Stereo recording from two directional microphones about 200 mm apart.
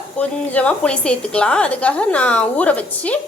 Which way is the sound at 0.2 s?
5° left (ahead or behind).